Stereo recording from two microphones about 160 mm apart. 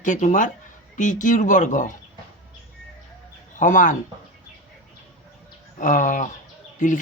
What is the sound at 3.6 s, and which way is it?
Speech, 50° left (ahead or behind).